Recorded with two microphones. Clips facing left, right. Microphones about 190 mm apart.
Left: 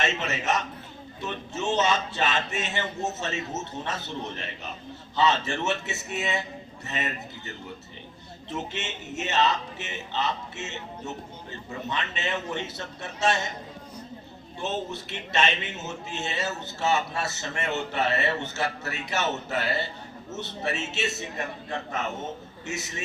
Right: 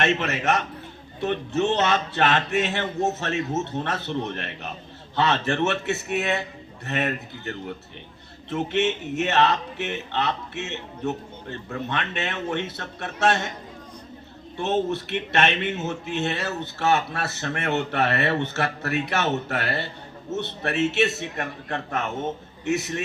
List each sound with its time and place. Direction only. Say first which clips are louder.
0.0 s a man's voice: right 5 dB; 60° right (ahead or behind)
14.6 s a man's voice: right 7 dB; 60° right (ahead or behind)